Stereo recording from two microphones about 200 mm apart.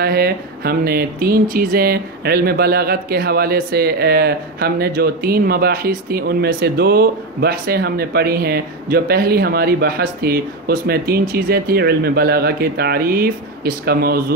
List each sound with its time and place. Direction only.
0.0 s speech: 50° right (ahead or behind)